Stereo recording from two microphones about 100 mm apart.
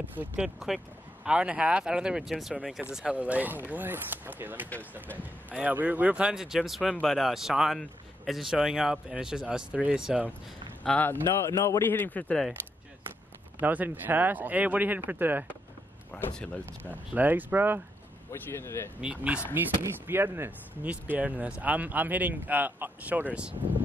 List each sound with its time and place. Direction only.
0.0 s speech: 15° right (ahead or behind)
10.8 s speech: 15° left (ahead or behind)
11.2 s speech: 30° left (ahead or behind)
11.8 s a man's voice: 20° left (ahead or behind)
13.6 s speech: 15° right (ahead or behind)
16.1 s a man's voice: 10° left (ahead or behind)
16.9 s speech: 15° right (ahead or behind)
18.3 s speech: 25° left (ahead or behind)
18.9 s speech: 10° right (ahead or behind)
19.8 s speech: 25° right (ahead or behind)